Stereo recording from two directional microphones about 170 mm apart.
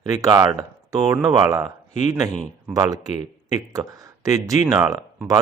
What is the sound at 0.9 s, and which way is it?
Speech, 5° right (ahead or behind).